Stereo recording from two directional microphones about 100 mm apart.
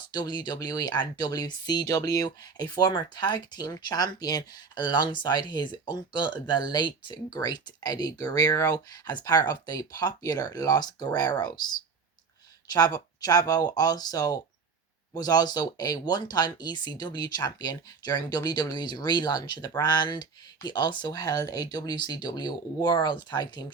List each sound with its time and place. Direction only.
0.1 s speech: 45° left (ahead or behind)
12.7 s speech: 40° left (ahead or behind)